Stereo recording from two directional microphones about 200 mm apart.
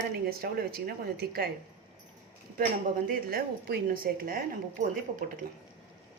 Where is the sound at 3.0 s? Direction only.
50° right (ahead or behind).